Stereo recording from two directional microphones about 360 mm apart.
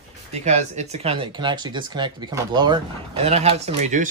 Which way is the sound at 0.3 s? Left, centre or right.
Centre.